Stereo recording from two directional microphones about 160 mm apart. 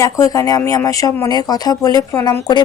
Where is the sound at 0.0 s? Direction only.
20° left (ahead or behind).